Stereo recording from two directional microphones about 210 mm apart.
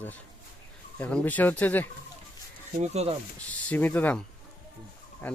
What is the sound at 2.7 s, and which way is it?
Speech, 35° right (ahead or behind).